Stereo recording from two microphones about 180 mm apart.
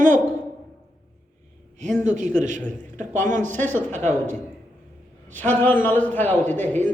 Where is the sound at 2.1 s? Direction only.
45° right (ahead or behind).